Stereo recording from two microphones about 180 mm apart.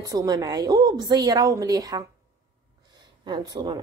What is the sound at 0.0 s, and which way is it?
A woman's voice, 20° right (ahead or behind).